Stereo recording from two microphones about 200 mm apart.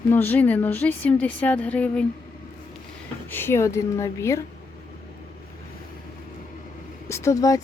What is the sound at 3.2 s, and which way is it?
A woman's voice, 10° left (ahead or behind).